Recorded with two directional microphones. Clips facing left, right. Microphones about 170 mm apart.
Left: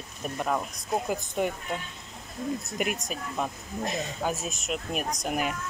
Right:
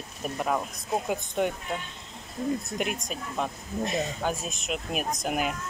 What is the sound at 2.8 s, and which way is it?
Speech, 5° left (ahead or behind).